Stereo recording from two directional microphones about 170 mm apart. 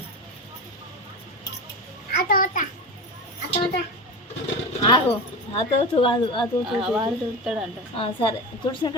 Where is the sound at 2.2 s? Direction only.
50° left (ahead or behind).